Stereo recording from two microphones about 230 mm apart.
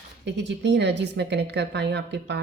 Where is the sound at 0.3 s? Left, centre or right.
Right.